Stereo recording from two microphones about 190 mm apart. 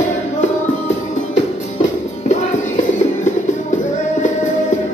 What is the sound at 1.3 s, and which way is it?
Music, 40° left (ahead or behind).